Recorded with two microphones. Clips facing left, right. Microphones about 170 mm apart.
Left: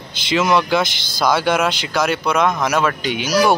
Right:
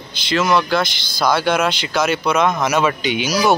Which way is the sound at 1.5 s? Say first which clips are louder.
Even; centre (ahead or behind).